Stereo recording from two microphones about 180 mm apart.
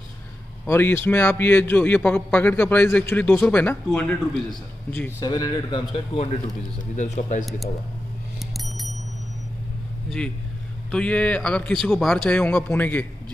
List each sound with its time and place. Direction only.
0.7 s a man's voice: 10° left (ahead or behind)
5.2 s a man's voice: 20° left (ahead or behind)
7.0 s speech: 40° left (ahead or behind)
7.4 s speech: centre (ahead or behind)
8.4 s a sound: centre (ahead or behind)
10.0 s a man's voice: 5° left (ahead or behind)